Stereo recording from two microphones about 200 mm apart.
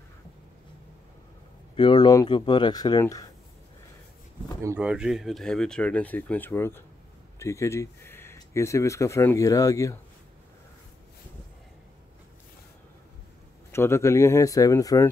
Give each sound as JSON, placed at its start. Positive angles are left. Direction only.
{"t": 1.8, "sound": "speech", "side_deg": 20}
{"t": 4.6, "sound": "speech", "side_deg": -5}
{"t": 13.7, "sound": "speech", "side_deg": 15}